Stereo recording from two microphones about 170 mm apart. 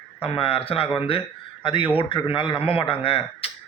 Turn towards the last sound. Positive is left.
turn(degrees=35)  # may be behind; listen again after turning